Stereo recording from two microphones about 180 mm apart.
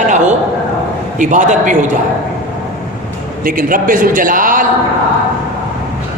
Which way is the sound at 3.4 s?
50° right (ahead or behind).